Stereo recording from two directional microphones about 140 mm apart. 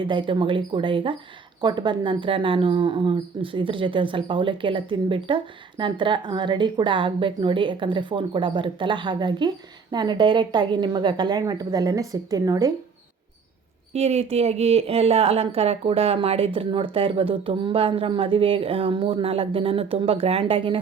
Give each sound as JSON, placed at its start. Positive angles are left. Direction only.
{"t": 0.1, "sound": "speech", "side_deg": -35}
{"t": 13.9, "sound": "speech", "side_deg": -50}